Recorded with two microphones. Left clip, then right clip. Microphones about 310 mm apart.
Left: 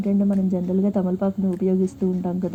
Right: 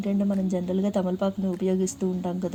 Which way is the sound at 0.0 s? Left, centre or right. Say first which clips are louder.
Left 4 dB; right.